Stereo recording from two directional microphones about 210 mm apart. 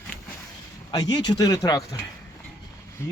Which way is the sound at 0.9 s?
20° left (ahead or behind).